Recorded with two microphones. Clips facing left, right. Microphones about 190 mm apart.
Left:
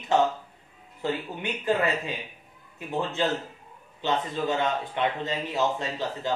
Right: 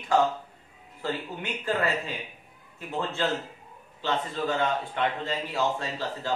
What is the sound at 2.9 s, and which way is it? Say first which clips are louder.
Speech: left 2 dB; 15° left (ahead or behind).